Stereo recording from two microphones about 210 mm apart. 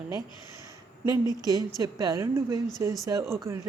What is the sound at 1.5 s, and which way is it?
A woman's voice, 20° right (ahead or behind).